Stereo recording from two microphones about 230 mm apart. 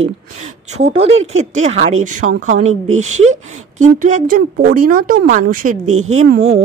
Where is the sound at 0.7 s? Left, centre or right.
Right.